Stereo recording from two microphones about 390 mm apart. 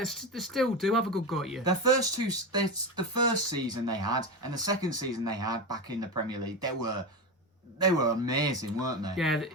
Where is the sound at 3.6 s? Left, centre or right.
Centre.